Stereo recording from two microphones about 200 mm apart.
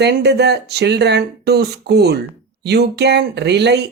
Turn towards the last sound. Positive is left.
turn(degrees=-60)  # may be behind; listen again after turning